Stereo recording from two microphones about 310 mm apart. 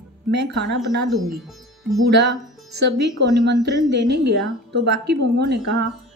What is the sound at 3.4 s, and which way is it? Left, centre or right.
A woman's voice, right.